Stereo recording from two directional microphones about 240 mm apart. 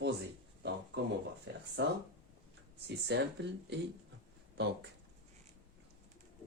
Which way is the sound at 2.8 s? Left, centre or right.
Right.